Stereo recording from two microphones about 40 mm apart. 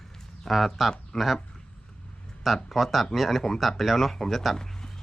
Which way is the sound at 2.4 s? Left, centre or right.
Centre.